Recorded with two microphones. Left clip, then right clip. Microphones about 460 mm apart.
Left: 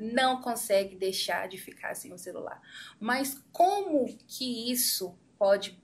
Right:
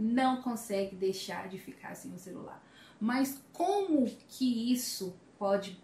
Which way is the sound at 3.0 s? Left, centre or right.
Left.